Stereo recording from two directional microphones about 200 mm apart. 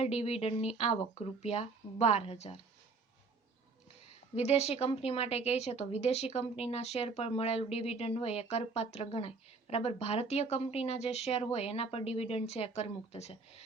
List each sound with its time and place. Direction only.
0.0 s a woman's voice: 30° left (ahead or behind)
4.4 s a woman's voice: 30° left (ahead or behind)